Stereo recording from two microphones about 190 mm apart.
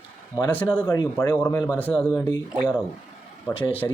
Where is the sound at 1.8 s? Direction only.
5° left (ahead or behind).